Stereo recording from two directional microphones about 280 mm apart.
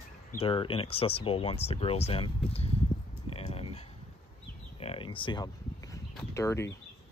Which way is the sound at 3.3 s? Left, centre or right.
Left.